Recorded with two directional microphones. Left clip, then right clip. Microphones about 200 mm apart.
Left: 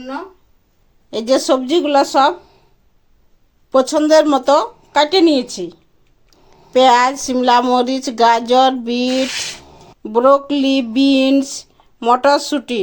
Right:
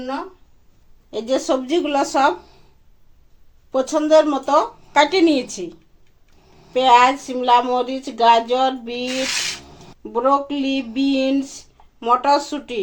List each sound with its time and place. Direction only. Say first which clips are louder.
1.1 s speech: left 5 dB; 45° left (ahead or behind)
3.7 s speech: left 4 dB; 45° left (ahead or behind)
4.9 s speech: left 4 dB; 35° left (ahead or behind)
6.7 s speech: left 2 dB; 45° left (ahead or behind)